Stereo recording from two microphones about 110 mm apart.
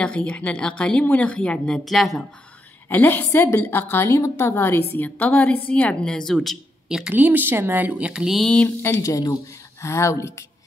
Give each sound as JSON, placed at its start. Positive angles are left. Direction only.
{"t": 0.0, "sound": "a woman's voice", "side_deg": 10}
{"t": 2.9, "sound": "a woman's voice", "side_deg": 20}
{"t": 7.2, "sound": "speech", "side_deg": -15}
{"t": 9.0, "sound": "a woman's voice", "side_deg": 30}